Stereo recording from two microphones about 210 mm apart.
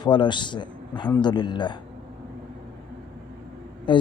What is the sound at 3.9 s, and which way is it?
Speech, 25° left (ahead or behind).